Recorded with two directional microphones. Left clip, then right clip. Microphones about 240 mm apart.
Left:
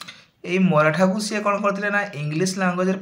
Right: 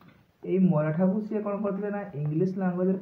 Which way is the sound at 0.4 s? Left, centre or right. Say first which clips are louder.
Left 8 dB; centre.